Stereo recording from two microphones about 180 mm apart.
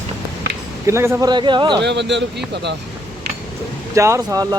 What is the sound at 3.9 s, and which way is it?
Speech, 15° right (ahead or behind).